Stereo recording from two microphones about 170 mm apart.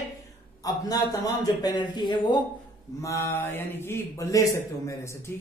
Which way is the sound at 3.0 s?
15° left (ahead or behind).